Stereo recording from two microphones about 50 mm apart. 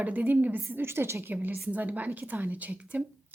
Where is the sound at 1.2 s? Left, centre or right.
Right.